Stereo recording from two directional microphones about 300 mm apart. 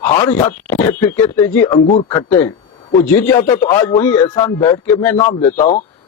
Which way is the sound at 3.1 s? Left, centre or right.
Centre.